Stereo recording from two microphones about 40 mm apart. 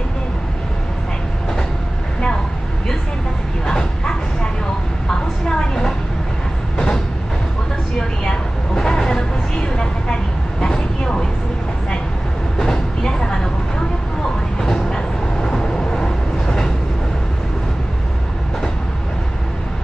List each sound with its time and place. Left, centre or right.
3.6 s bow-wow: centre
5.5 s vehicle: centre
8.2 s vehicle: centre
12.5 s train: centre
14.6 s vehicle: centre